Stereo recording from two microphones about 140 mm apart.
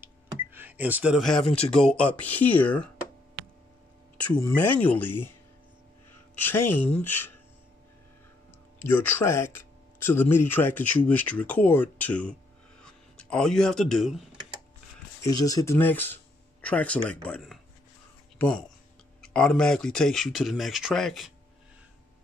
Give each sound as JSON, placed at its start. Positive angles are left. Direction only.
{"t": 0.0, "sound": "a sound", "side_deg": -15}
{"t": 1.4, "sound": "speech", "side_deg": 45}
{"t": 1.9, "sound": "speech", "side_deg": 10}
{"t": 4.3, "sound": "speech", "side_deg": 10}
{"t": 6.3, "sound": "speech", "side_deg": 15}
{"t": 8.8, "sound": "speech", "side_deg": 15}
{"t": 15.2, "sound": "speech", "side_deg": 25}
{"t": 19.2, "sound": "speech", "side_deg": 5}